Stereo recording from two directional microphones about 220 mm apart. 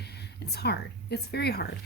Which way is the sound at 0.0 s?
50° left (ahead or behind).